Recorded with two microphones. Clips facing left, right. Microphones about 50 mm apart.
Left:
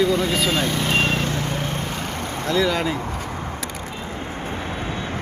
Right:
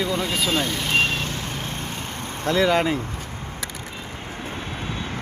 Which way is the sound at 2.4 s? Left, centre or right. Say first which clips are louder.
Right 2 dB; right.